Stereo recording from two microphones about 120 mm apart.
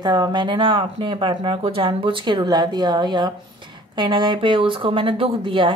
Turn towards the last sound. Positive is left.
turn(degrees=-45)  # may be behind; listen again after turning